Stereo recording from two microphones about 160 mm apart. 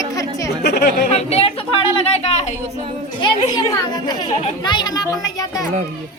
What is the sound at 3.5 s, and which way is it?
A child's voice, 25° left (ahead or behind).